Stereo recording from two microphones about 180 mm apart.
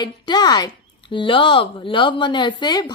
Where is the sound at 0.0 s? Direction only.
25° left (ahead or behind).